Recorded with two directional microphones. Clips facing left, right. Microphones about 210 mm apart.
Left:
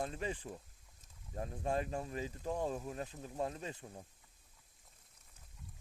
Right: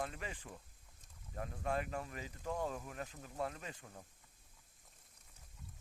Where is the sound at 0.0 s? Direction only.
30° left (ahead or behind).